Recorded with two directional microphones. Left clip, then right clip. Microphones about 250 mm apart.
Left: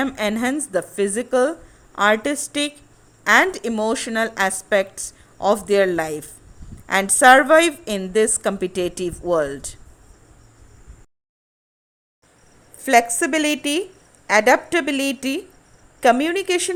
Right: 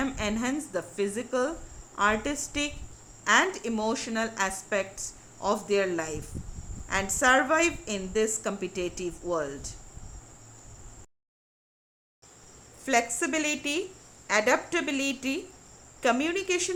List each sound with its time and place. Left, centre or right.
0.0 s a woman's voice: left
12.8 s a woman's voice: left